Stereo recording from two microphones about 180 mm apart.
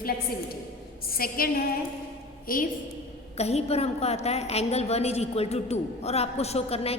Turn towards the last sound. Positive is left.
turn(degrees=35)  # may be behind; listen again after turning